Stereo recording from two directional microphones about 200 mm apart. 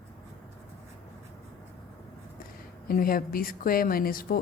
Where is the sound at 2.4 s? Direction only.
45° left (ahead or behind).